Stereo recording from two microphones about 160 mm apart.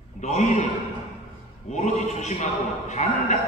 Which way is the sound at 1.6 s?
45° left (ahead or behind).